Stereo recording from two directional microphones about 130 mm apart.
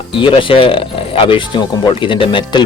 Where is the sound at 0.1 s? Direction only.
40° left (ahead or behind).